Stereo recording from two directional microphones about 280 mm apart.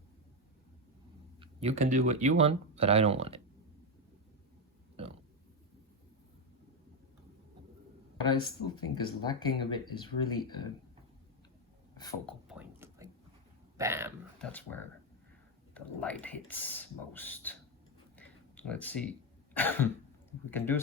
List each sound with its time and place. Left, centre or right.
1.4 s speech: right
8.3 s speech: centre
12.2 s a sound: centre
14.3 s speech: centre
18.2 s a sound: centre
19.5 s speech: centre